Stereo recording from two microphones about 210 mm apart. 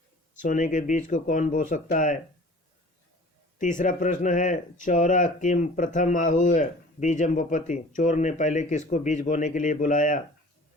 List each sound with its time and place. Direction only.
0.4 s speech: 35° left (ahead or behind)
3.6 s speech: 40° left (ahead or behind)